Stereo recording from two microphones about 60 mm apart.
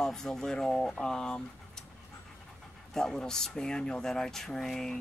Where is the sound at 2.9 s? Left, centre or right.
Centre.